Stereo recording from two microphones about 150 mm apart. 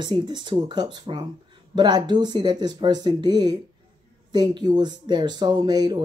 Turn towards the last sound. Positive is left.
turn(degrees=-25)  # may be behind; listen again after turning